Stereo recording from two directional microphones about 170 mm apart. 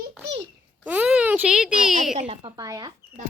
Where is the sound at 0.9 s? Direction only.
10° right (ahead or behind).